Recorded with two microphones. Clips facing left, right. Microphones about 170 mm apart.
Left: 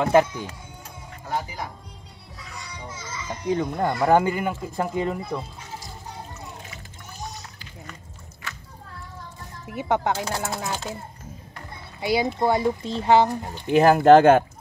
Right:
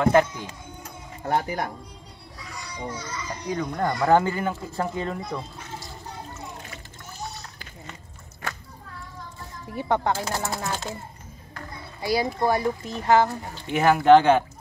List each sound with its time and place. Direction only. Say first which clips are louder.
0.0 s speech: left 1 dB; 10° left (ahead or behind)
1.2 s speech: right 5 dB; 60° right (ahead or behind)
2.9 s speech: left 2 dB; centre (ahead or behind)
3.4 s speech: left 5 dB; 25° left (ahead or behind)
3.8 s speech: even; 10° left (ahead or behind)
9.7 s speech: even; 15° left (ahead or behind)
10.1 s speech: left 1 dB; centre (ahead or behind)
12.0 s speech: left 1 dB; 20° left (ahead or behind)
13.7 s speech: left 2 dB; 40° left (ahead or behind)